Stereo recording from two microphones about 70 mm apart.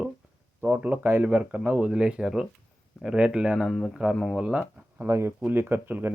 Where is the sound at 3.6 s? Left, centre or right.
Centre.